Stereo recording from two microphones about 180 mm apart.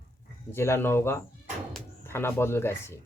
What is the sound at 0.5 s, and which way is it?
Speech, 15° left (ahead or behind).